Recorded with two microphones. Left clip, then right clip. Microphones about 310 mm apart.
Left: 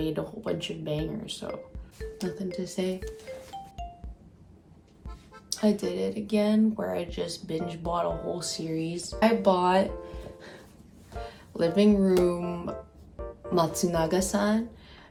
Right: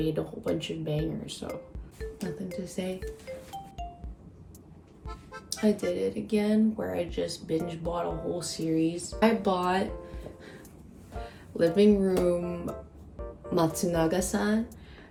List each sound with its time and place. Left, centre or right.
0.0 s speech: centre
2.0 s music: centre
2.8 s speech: centre
5.0 s music: centre
5.8 s speech: centre
11.2 s speech: centre